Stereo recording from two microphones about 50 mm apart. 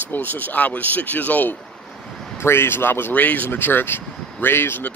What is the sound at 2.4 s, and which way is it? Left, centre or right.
Speech, left.